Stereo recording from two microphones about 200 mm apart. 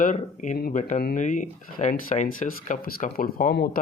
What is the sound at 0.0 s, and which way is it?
Speech, 40° left (ahead or behind).